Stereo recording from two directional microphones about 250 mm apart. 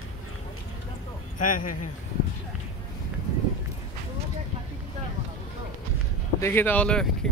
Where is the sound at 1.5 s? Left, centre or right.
Left.